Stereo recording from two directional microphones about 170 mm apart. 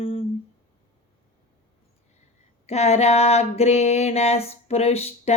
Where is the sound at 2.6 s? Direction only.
40° left (ahead or behind).